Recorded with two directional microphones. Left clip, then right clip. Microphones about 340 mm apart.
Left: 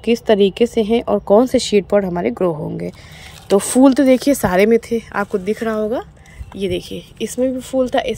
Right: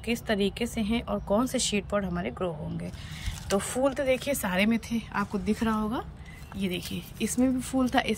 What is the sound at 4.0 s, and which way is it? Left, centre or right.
Speech, centre.